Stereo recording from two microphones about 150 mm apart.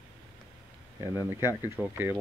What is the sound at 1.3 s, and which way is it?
Speech, 15° right (ahead or behind).